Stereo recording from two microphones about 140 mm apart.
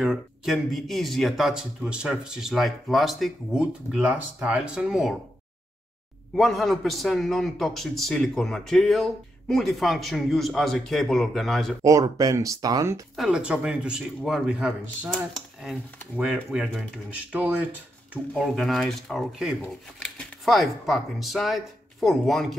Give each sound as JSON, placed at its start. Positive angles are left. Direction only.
{"t": 0.0, "sound": "a man's voice", "side_deg": -5}
{"t": 6.3, "sound": "a man's voice", "side_deg": 0}
{"t": 11.8, "sound": "speech", "side_deg": -25}
{"t": 13.1, "sound": "a man's voice", "side_deg": -5}